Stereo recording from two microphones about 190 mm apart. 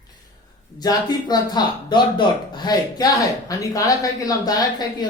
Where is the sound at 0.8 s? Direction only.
20° left (ahead or behind).